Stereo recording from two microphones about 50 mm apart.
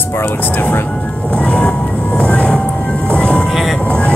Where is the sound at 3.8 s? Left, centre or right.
Left.